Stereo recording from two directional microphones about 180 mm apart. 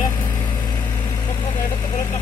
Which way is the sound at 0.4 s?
25° left (ahead or behind).